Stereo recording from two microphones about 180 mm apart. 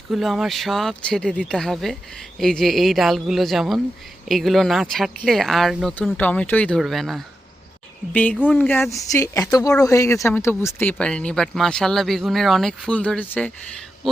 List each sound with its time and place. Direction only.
0.1 s speech: centre (ahead or behind)